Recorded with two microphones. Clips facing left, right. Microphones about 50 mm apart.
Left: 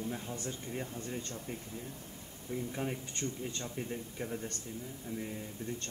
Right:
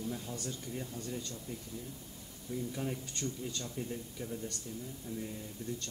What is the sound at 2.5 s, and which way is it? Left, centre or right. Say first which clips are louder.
Speech: left 1 dB; left.